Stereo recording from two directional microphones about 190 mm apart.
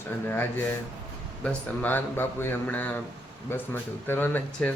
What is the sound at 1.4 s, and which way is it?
Speech, 10° left (ahead or behind).